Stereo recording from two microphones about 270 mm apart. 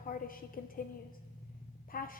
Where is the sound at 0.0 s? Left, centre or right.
Left.